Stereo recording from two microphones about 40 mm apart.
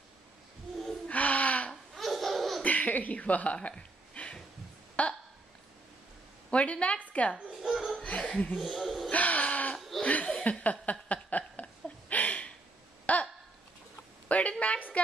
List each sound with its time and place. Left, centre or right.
1.0 s gasp: left
1.7 s laughter: centre
2.6 s speech: left
3.5 s a sound: left
5.0 s hiccup: left
6.5 s a woman's voice: left
7.6 s laughter: centre
8.0 s laughter: left
8.5 s speech: centre
9.1 s a sound: left
10.0 s chuckle: left
10.6 s a sound: left
14.3 s a woman's voice: left